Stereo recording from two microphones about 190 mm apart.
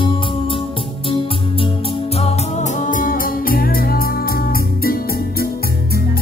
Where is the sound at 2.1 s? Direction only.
35° left (ahead or behind).